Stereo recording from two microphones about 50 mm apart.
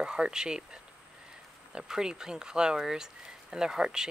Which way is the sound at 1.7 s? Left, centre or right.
Centre.